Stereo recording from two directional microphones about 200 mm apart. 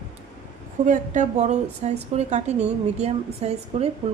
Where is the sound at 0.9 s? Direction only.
35° right (ahead or behind).